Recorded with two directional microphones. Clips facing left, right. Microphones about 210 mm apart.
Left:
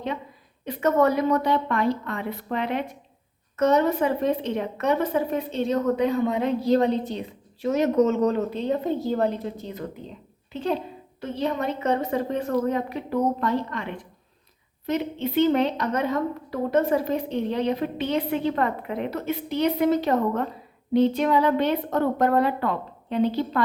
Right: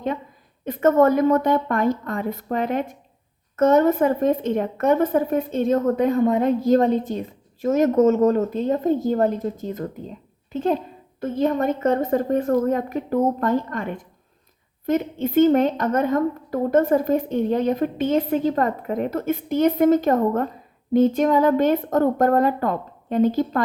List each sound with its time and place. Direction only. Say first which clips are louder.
0.6 s a woman's voice: right 4 dB; 50° right (ahead or behind)